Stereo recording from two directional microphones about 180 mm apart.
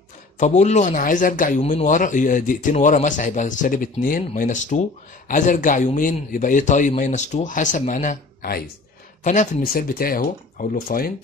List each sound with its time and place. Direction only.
0.4 s speech: 40° left (ahead or behind); by 8.6 s 55° left (ahead or behind)
9.2 s speech: 45° left (ahead or behind)